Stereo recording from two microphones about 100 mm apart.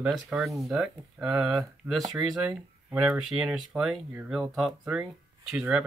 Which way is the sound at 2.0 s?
40° right (ahead or behind).